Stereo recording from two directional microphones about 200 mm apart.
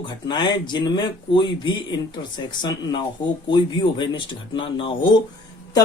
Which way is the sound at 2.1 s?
20° left (ahead or behind).